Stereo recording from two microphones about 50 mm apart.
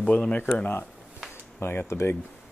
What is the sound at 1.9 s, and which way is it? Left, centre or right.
Speech, left.